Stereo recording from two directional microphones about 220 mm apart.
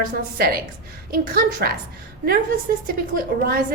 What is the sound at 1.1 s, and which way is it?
Speech, 40° right (ahead or behind).